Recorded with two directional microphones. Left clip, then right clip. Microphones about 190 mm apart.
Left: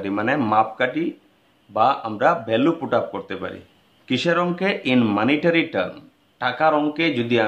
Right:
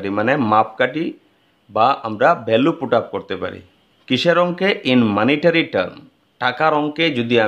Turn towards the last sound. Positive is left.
turn(degrees=-40)  # may be behind; listen again after turning